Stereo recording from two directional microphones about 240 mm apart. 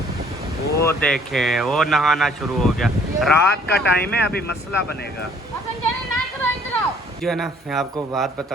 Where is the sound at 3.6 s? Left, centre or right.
Left.